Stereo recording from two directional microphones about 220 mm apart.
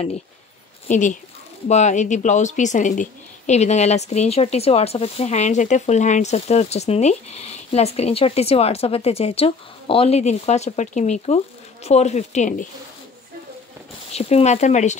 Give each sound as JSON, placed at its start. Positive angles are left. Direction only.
{"t": 0.8, "sound": "a woman's voice", "side_deg": 35}
{"t": 14.1, "sound": "speech", "side_deg": 30}